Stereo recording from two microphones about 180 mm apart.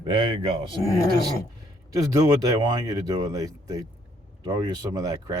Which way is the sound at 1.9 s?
20° right (ahead or behind).